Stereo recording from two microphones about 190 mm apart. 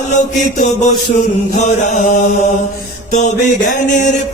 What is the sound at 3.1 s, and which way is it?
Mantra, 40° left (ahead or behind).